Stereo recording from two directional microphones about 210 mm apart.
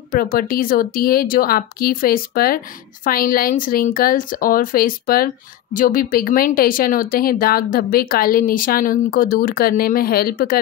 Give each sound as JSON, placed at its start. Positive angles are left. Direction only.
{"t": 0.1, "sound": "a woman's voice", "side_deg": 45}